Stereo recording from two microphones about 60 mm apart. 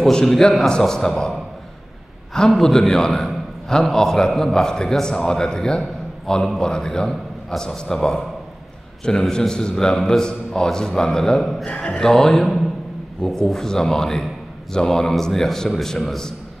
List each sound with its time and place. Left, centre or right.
0.0 s a man's voice: centre
2.3 s a man's voice: centre
11.7 s speech: left
12.0 s a man's voice: centre